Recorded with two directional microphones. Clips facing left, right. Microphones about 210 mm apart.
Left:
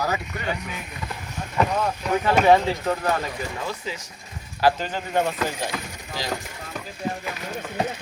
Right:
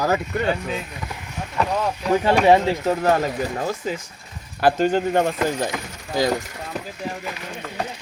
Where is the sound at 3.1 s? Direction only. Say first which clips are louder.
Right 6 dB; 45° right (ahead or behind).